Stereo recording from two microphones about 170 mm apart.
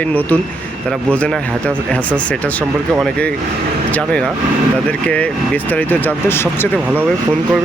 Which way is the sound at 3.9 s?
5° left (ahead or behind).